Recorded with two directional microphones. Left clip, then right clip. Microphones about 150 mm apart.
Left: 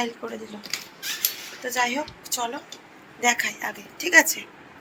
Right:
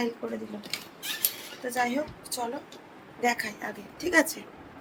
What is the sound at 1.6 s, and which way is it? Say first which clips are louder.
A woman's voice: left 4 dB; 15° right (ahead or behind).